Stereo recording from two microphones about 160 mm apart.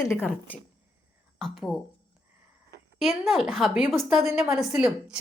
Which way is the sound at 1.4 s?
Centre (ahead or behind).